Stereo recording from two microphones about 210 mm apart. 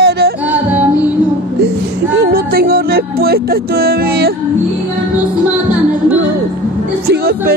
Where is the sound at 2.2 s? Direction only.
45° right (ahead or behind).